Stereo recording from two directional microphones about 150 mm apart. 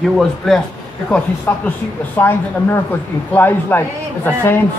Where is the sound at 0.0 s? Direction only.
Centre (ahead or behind).